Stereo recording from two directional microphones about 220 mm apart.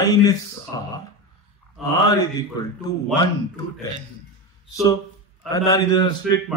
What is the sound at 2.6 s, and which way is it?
Speech, 20° left (ahead or behind).